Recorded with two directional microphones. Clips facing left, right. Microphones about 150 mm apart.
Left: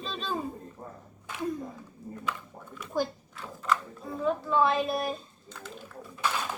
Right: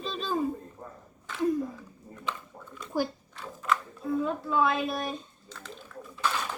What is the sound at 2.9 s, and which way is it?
Speech, 10° right (ahead or behind).